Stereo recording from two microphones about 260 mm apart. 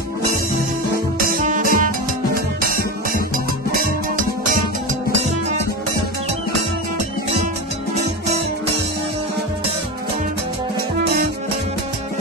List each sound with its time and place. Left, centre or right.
1.2 s music: right